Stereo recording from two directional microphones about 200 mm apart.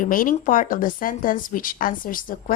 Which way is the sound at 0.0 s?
45° left (ahead or behind).